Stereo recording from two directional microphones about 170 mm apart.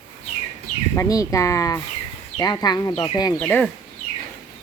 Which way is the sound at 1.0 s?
20° left (ahead or behind).